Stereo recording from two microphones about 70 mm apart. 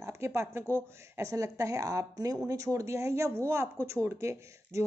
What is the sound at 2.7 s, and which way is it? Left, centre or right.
Speech, right.